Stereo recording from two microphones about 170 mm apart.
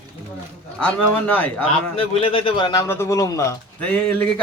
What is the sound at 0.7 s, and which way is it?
Speech, 10° left (ahead or behind).